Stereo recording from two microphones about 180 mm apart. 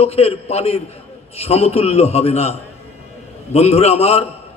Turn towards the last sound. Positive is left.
turn(degrees=35)  # may be behind; listen again after turning